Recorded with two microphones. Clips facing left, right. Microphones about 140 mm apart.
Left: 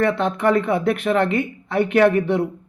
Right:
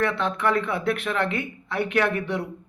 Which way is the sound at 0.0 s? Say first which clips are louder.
Left 5 dB; 45° left (ahead or behind).